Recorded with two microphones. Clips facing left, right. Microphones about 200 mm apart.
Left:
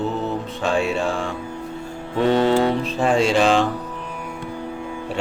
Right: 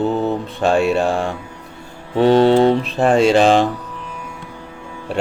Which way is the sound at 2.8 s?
60° right (ahead or behind).